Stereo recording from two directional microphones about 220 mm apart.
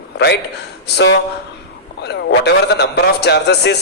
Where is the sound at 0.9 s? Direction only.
50° left (ahead or behind).